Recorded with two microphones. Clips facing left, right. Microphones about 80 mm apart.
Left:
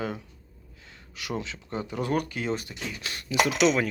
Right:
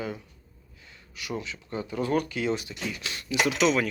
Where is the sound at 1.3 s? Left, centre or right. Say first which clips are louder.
Left 1 dB; left.